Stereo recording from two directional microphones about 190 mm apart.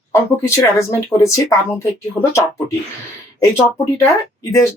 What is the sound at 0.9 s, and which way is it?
Speech, 15° left (ahead or behind).